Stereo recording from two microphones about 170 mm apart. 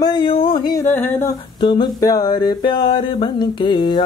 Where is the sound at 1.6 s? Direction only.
25° left (ahead or behind).